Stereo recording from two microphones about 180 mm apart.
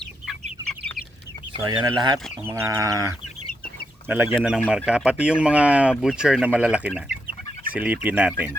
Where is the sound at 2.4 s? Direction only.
10° right (ahead or behind).